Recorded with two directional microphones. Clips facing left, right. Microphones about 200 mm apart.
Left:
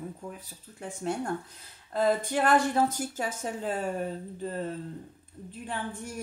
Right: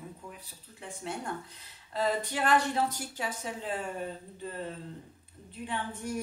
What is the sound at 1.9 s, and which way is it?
Speech, 45° left (ahead or behind).